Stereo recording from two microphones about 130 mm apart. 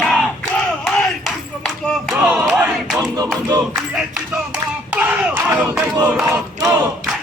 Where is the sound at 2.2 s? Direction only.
10° right (ahead or behind).